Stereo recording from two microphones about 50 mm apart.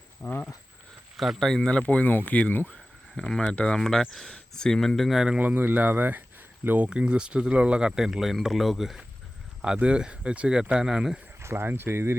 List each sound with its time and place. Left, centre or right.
0.2 s speech: centre
1.1 s speech: centre
1.6 s speech: left
3.2 s speech: centre
3.5 s speech: left
3.8 s speech: centre
4.3 s speech: centre
5.4 s speech: right
7.0 s speech: centre
9.7 s speech: right
11.3 s speech: right